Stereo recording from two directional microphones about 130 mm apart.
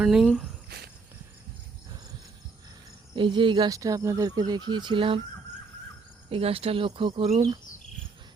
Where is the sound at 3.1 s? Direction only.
40° right (ahead or behind).